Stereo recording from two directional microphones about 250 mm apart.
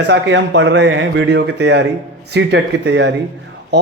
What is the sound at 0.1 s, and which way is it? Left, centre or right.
A man's voice, right.